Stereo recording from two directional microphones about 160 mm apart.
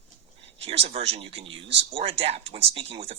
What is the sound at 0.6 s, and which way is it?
Speech, 35° right (ahead or behind).